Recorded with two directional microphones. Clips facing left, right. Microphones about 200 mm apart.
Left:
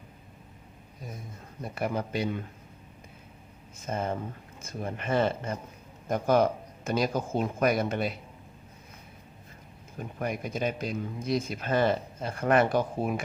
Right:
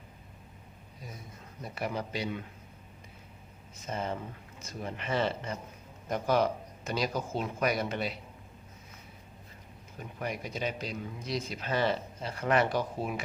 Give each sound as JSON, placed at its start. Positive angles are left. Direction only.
{"t": 1.6, "sound": "a man's voice", "side_deg": 50}
{"t": 3.8, "sound": "a man's voice", "side_deg": 50}
{"t": 10.0, "sound": "a man's voice", "side_deg": 50}